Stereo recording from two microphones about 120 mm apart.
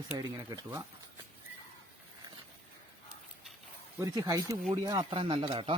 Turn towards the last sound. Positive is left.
turn(degrees=-50)  # may be behind; listen again after turning